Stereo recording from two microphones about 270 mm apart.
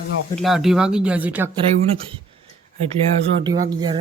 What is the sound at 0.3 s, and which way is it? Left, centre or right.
Speech, centre.